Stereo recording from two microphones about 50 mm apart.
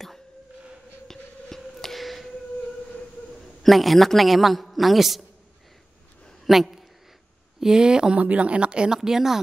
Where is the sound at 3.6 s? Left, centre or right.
Centre.